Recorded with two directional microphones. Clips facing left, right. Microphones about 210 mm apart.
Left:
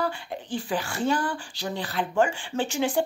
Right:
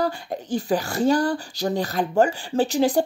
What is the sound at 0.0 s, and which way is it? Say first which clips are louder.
Speech: right 4 dB; 40° right (ahead or behind).